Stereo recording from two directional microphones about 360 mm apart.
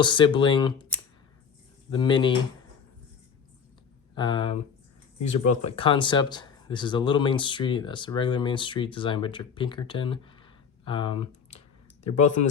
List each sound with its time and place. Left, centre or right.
0.0 s speech: centre
4.1 s speech: centre